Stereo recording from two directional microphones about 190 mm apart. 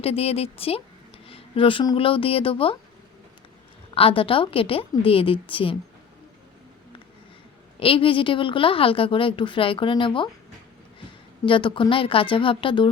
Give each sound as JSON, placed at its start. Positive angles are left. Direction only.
{"t": 0.0, "sound": "a woman's voice", "side_deg": 30}
{"t": 3.9, "sound": "a woman's voice", "side_deg": 30}
{"t": 7.8, "sound": "a woman's voice", "side_deg": 30}
{"t": 11.4, "sound": "a woman's voice", "side_deg": 25}